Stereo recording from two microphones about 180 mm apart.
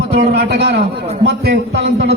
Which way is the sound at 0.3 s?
70° right (ahead or behind).